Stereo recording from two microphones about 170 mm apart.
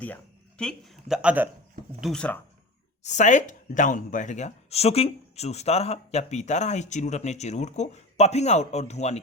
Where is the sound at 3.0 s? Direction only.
45° left (ahead or behind).